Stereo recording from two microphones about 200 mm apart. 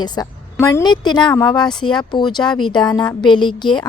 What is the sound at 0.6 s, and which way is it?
A woman's voice, 15° left (ahead or behind).